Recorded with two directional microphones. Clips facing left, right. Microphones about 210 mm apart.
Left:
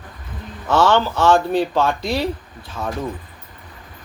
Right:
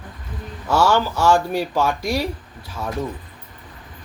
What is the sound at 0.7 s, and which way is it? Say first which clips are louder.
Speech: left 2 dB; 10° right (ahead or behind).